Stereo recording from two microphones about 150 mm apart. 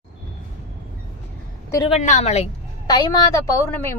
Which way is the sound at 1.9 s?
50° left (ahead or behind).